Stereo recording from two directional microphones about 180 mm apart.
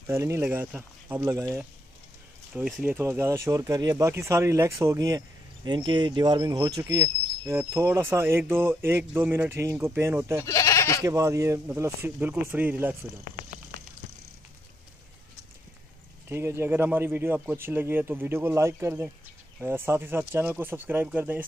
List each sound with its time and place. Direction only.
0.0 s speech: 15° right (ahead or behind)
10.4 s speech: 15° left (ahead or behind)
11.1 s speech: 15° right (ahead or behind)
16.3 s speech: 15° right (ahead or behind)